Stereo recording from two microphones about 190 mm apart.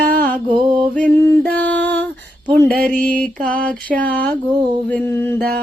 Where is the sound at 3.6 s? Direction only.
10° left (ahead or behind).